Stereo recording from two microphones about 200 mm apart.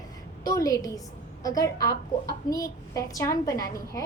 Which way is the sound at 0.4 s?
15° left (ahead or behind).